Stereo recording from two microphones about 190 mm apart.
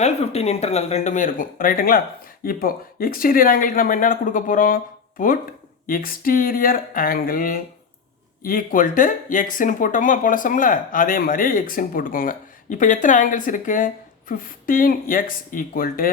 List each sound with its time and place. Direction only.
0.0 s speech: 35° left (ahead or behind)